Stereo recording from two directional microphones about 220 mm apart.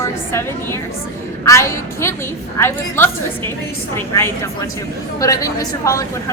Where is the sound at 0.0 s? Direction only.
10° left (ahead or behind).